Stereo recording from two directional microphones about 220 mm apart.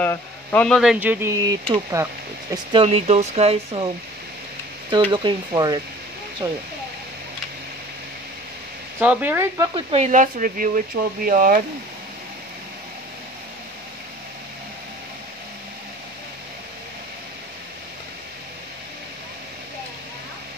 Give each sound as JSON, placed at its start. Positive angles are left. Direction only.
{"t": 0.0, "sound": "speech", "side_deg": 10}
{"t": 5.1, "sound": "speech", "side_deg": -20}
{"t": 9.0, "sound": "speech", "side_deg": -5}
{"t": 9.8, "sound": "speech", "side_deg": -25}